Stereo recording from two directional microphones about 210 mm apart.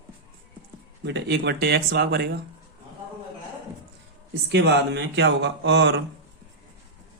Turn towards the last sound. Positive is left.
turn(degrees=-55)  # may be behind; listen again after turning